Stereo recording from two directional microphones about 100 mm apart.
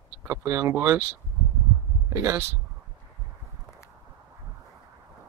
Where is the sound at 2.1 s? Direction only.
30° right (ahead or behind).